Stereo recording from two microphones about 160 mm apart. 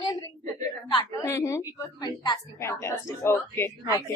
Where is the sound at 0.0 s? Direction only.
25° left (ahead or behind).